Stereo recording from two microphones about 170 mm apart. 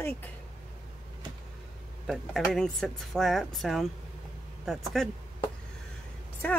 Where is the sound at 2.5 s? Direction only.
5° left (ahead or behind).